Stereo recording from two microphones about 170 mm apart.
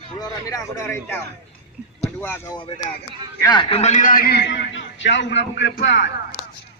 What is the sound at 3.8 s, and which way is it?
A man's voice, 45° left (ahead or behind).